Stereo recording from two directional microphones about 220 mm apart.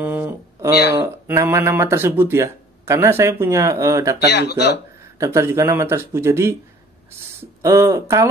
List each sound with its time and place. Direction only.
0.0 s a sound: 10° right (ahead or behind)
1.0 s speech: 10° right (ahead or behind)
4.2 s speech: 50° left (ahead or behind)
5.2 s speech: 10° right (ahead or behind)
7.6 s speech: 15° right (ahead or behind)